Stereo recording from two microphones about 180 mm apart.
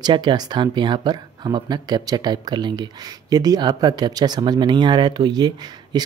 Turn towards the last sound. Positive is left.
turn(degrees=-25)  # may be behind; listen again after turning